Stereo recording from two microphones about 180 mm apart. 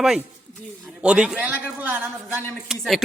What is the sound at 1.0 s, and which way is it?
A man's voice, 5° right (ahead or behind).